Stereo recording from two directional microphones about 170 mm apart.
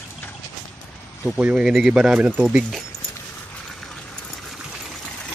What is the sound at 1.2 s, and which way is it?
Speech, 5° right (ahead or behind).